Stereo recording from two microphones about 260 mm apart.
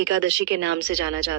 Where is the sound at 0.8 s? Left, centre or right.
Right.